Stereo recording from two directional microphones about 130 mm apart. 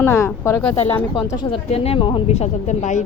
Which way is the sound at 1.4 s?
45° left (ahead or behind).